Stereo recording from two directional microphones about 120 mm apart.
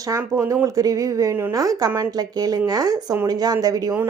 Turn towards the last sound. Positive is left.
turn(degrees=-30)  # may be behind; listen again after turning